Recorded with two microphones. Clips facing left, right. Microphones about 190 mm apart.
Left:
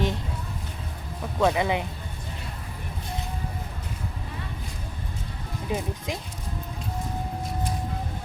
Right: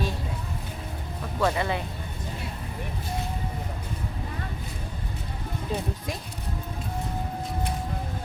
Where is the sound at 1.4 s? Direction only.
15° left (ahead or behind).